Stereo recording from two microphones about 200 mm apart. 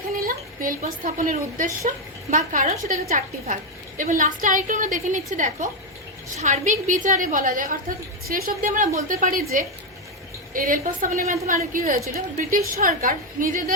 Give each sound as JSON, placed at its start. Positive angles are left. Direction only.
{"t": 0.3, "sound": "a woman's voice", "side_deg": -45}